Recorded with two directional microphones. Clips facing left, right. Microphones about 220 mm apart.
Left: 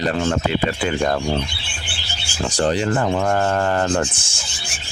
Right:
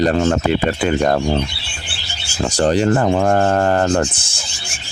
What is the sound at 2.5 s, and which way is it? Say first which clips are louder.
Speech: right 4 dB; 40° right (ahead or behind).